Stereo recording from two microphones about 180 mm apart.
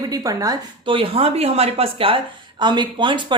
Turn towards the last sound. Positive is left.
turn(degrees=-25)  # may be behind; listen again after turning